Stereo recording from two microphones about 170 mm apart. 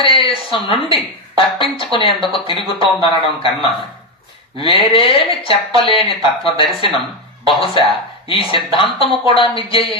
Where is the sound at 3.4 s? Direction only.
30° left (ahead or behind).